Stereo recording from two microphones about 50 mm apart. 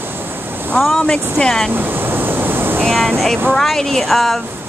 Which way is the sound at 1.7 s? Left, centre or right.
Right.